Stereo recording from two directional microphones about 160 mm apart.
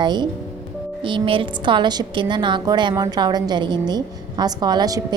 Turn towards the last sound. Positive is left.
turn(degrees=-25)  # may be behind; listen again after turning